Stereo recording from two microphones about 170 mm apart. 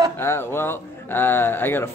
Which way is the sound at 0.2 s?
15° left (ahead or behind).